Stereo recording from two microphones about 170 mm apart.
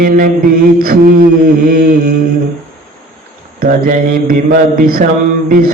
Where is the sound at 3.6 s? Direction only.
60° right (ahead or behind).